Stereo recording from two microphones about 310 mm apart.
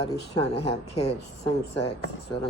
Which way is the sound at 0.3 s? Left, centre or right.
Centre.